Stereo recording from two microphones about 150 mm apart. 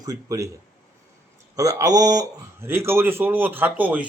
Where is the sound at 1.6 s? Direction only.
20° right (ahead or behind).